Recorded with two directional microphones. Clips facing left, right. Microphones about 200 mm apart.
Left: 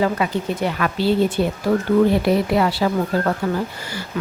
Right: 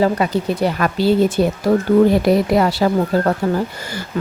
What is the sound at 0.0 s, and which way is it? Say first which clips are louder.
A woman's voice: right 4 dB; 35° right (ahead or behind).